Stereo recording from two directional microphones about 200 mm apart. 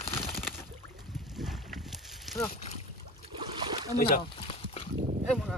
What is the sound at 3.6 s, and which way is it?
Boat, 25° right (ahead or behind).